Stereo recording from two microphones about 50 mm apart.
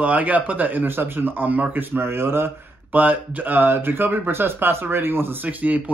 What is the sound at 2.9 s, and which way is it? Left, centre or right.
Speech, right.